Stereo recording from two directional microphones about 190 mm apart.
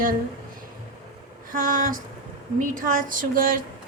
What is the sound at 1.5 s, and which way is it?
A woman's voice, 45° right (ahead or behind).